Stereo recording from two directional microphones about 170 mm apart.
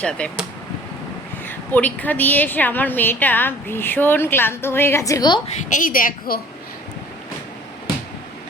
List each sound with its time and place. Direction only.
0.0 s speech: 5° left (ahead or behind)
1.5 s a woman's voice: 10° left (ahead or behind)
5.6 s a woman's voice: 50° left (ahead or behind)